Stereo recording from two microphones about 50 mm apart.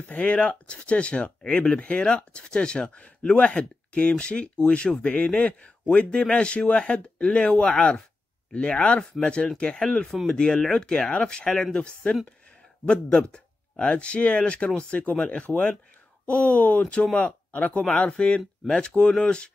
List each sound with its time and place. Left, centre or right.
0.1 s a man's voice: left